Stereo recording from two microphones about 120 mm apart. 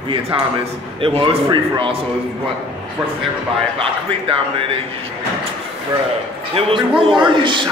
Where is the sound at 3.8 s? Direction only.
50° right (ahead or behind).